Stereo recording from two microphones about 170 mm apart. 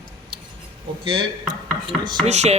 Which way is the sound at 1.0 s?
30° right (ahead or behind).